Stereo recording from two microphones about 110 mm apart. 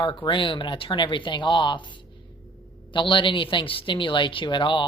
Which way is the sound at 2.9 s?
50° left (ahead or behind).